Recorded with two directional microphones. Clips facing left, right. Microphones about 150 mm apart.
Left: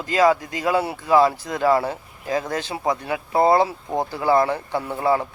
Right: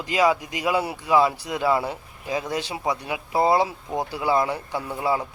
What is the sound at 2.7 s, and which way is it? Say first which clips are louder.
Speech: left 5 dB; 35° left (ahead or behind).